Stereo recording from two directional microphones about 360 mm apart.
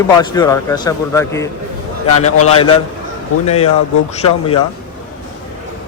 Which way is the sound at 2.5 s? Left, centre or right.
Centre.